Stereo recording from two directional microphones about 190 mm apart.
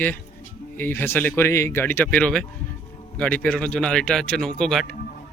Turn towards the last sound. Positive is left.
turn(degrees=0)  # may be behind; listen again after turning